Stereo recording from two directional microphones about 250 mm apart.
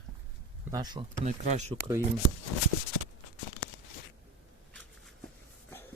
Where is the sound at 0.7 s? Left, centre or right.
Centre.